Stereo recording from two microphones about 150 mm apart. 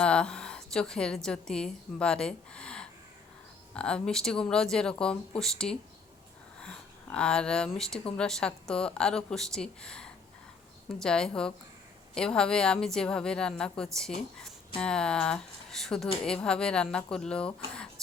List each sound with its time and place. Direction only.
0.0 s a woman's voice: 5° left (ahead or behind)